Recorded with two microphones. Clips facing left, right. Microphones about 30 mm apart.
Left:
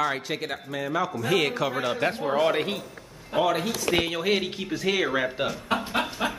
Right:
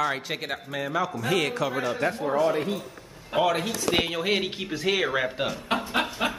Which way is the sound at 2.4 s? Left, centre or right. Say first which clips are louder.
Left 1 dB; left.